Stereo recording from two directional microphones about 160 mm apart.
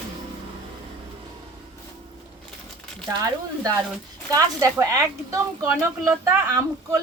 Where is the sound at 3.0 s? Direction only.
20° right (ahead or behind).